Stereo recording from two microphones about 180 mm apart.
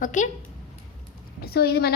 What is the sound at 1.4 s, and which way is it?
Speech, 60° left (ahead or behind).